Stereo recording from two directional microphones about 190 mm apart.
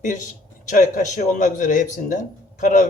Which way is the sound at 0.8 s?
40° left (ahead or behind).